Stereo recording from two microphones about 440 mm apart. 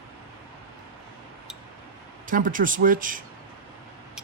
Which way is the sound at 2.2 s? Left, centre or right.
Centre.